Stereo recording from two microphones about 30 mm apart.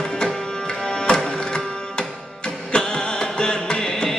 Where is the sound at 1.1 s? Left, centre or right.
Left.